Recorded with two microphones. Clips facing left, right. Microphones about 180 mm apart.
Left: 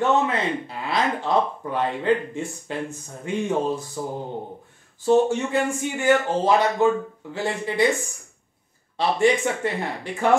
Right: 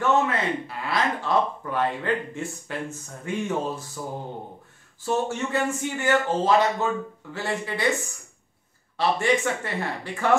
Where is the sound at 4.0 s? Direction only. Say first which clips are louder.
Left 4 dB; 25° left (ahead or behind).